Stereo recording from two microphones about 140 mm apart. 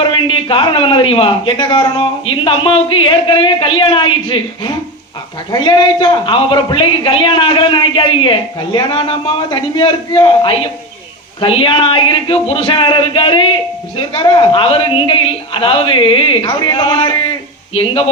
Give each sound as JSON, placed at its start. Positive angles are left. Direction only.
{"t": 0.0, "sound": "a man's voice", "side_deg": 35}